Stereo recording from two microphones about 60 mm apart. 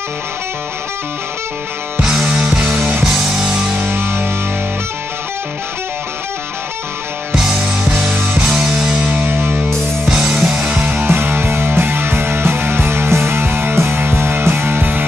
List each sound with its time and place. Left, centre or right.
2.2 s music: centre
3.0 s music: centre
3.9 s music: right
7.3 s music: centre
9.1 s music: right
10.0 s music: centre
10.6 s music: right